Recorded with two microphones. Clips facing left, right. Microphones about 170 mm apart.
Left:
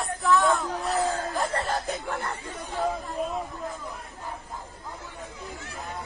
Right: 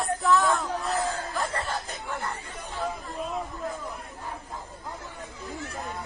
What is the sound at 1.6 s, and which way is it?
Snake, 60° left (ahead or behind).